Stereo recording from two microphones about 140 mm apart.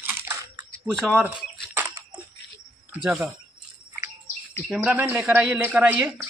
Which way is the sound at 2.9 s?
5° right (ahead or behind).